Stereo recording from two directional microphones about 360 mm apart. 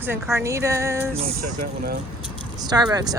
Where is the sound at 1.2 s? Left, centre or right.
Right.